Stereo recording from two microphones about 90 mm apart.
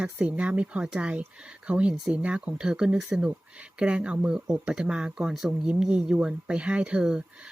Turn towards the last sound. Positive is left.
turn(degrees=-10)  # may be behind; listen again after turning